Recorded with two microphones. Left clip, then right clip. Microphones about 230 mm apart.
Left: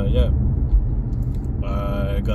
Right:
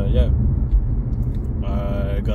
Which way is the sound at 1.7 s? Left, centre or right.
Centre.